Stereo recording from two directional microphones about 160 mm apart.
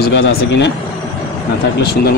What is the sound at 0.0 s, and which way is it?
Speech, 85° left.